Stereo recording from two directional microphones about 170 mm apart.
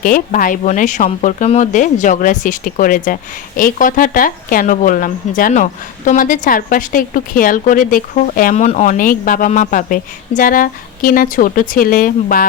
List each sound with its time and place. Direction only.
0.0 s a woman's voice: 55° left (ahead or behind)